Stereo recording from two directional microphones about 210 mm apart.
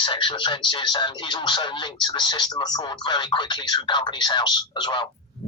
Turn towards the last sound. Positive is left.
turn(degrees=20)  # may be behind; listen again after turning